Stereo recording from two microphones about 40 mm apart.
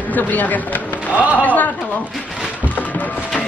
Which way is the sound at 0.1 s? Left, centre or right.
Left.